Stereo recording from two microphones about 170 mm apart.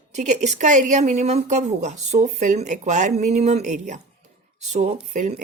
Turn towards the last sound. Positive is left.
turn(degrees=-45)  # may be behind; listen again after turning